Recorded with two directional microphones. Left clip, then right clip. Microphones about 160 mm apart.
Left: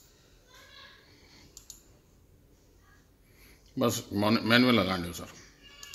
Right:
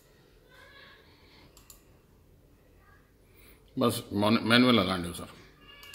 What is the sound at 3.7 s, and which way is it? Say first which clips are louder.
A man's voice: right 1 dB; 5° left (ahead or behind).